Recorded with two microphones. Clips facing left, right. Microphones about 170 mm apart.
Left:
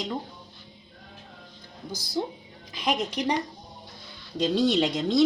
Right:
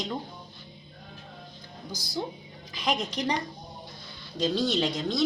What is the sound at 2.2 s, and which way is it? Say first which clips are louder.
Speech: left 3 dB; 20° left (ahead or behind).